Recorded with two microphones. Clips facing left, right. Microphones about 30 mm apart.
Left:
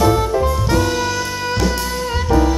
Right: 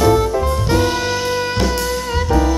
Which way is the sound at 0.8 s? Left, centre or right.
Right.